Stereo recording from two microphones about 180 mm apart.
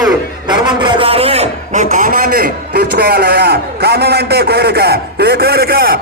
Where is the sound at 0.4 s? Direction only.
25° right (ahead or behind).